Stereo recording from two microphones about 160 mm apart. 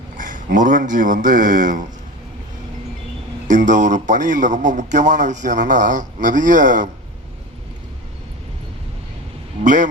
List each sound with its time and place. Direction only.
0.2 s a man's voice: 55° right (ahead or behind)
3.4 s a man's voice: 50° right (ahead or behind)
9.6 s a man's voice: 50° right (ahead or behind)